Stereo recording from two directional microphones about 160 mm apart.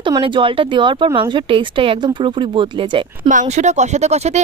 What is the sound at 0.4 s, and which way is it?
Speech, 30° right (ahead or behind).